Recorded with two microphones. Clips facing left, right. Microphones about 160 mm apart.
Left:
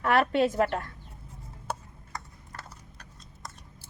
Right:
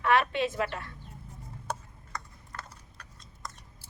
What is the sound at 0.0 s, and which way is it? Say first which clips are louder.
Speech: left 3 dB; 45° left (ahead or behind).